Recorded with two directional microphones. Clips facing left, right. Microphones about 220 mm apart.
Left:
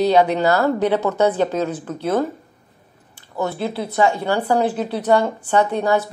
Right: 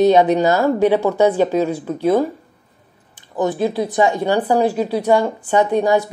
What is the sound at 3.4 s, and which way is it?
Speech, 15° right (ahead or behind).